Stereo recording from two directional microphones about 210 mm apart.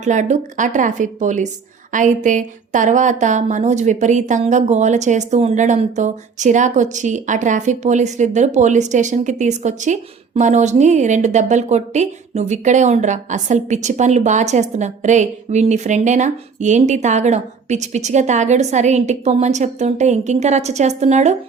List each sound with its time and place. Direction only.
0.0 s a woman's voice: 35° right (ahead or behind)